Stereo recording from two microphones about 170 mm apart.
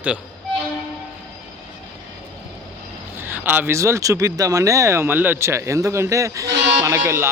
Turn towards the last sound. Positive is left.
turn(degrees=-15)  # may be behind; listen again after turning